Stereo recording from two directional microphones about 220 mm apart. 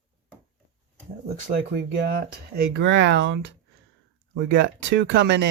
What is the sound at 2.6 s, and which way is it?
Speech, 55° right (ahead or behind).